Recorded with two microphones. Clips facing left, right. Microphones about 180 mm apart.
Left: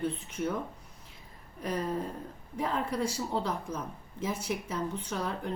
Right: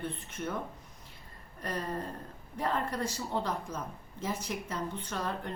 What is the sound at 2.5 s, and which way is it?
A woman's voice, 10° left (ahead or behind).